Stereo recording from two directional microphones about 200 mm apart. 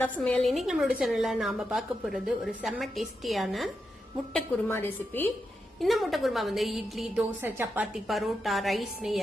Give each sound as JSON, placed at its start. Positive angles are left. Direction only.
{"t": 0.0, "sound": "a woman's voice", "side_deg": 5}
{"t": 4.4, "sound": "a woman's voice", "side_deg": 10}
{"t": 5.8, "sound": "a woman's voice", "side_deg": 0}